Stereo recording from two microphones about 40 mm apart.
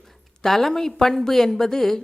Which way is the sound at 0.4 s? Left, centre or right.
Centre.